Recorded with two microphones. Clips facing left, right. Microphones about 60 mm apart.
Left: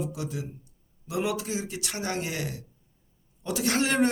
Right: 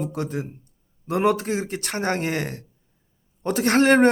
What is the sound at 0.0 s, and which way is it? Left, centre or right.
A man's voice, right.